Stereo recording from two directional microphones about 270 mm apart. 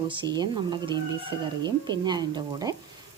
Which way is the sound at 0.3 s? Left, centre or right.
Centre.